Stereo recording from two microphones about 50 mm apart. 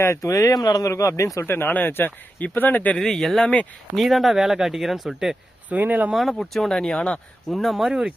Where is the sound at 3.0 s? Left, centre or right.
Centre.